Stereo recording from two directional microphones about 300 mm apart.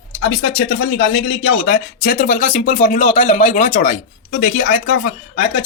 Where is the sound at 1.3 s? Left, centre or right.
Left.